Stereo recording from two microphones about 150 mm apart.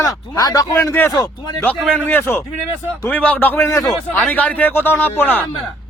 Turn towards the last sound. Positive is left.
turn(degrees=15)  # may be behind; listen again after turning